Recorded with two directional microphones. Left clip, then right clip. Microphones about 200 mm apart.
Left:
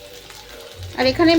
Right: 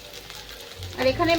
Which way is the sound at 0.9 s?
45° left (ahead or behind).